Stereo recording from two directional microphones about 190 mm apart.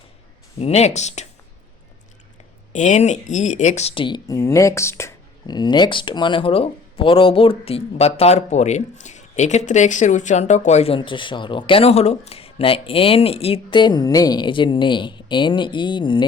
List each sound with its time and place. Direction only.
0.6 s speech: 35° left (ahead or behind)
2.7 s speech: 40° left (ahead or behind)